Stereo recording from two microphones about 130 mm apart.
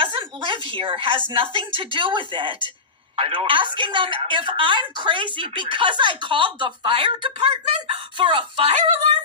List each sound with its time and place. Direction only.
0.0 s a woman's voice: 40° right (ahead or behind)